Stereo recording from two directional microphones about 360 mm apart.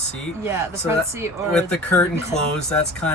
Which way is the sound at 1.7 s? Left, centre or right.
Centre.